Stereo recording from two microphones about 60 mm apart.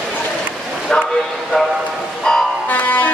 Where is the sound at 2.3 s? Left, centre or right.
Centre.